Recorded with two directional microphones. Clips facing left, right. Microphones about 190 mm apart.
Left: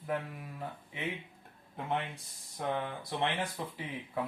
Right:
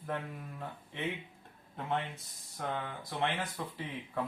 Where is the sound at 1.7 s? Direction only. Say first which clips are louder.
Even; 15° left (ahead or behind).